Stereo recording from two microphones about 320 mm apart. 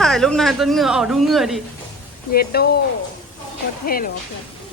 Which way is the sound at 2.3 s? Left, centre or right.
Left.